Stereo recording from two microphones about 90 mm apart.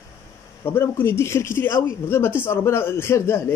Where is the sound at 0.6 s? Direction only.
25° left (ahead or behind).